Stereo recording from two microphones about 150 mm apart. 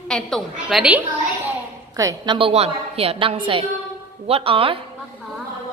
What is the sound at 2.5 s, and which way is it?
A woman's voice, 40° right (ahead or behind).